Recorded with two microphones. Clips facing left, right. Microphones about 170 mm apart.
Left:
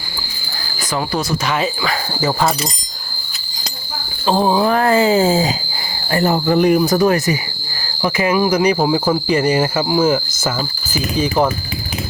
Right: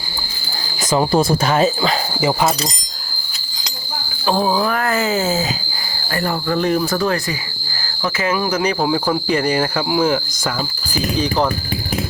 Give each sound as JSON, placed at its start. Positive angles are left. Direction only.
{"t": 0.9, "sound": "speech", "side_deg": -25}
{"t": 1.5, "sound": "speech", "side_deg": -45}
{"t": 4.4, "sound": "speech", "side_deg": 25}
{"t": 9.9, "sound": "cricket", "side_deg": 5}
{"t": 10.9, "sound": "speech", "side_deg": 5}